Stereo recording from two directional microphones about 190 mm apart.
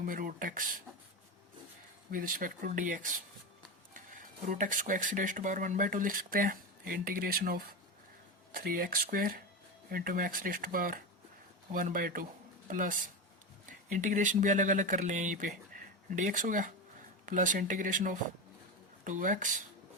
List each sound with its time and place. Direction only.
0.0 s speech: 45° right (ahead or behind)
2.0 s speech: 45° right (ahead or behind)